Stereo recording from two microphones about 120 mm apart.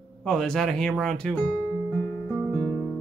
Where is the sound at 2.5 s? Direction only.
15° left (ahead or behind).